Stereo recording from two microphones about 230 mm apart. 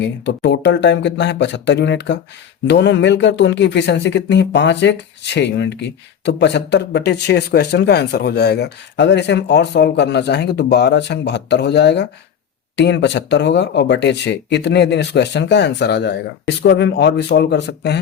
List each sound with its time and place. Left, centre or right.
0.0 s speech: left